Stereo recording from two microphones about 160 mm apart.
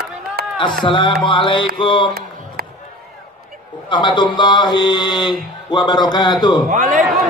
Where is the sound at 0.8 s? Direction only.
30° left (ahead or behind).